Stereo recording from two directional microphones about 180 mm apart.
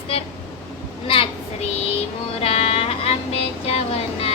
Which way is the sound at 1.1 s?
30° left (ahead or behind).